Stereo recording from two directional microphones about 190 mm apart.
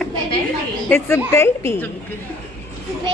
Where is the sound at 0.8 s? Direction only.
10° left (ahead or behind).